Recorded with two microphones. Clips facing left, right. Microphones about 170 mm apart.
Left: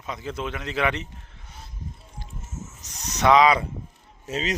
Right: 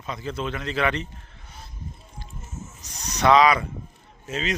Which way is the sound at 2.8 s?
20° left (ahead or behind).